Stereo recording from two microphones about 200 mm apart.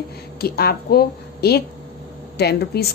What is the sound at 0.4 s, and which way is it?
A woman's voice, 50° left (ahead or behind).